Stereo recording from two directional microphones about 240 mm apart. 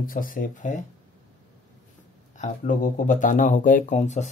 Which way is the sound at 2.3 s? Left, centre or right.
Left.